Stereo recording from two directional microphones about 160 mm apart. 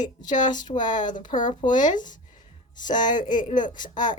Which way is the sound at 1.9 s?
55° left (ahead or behind).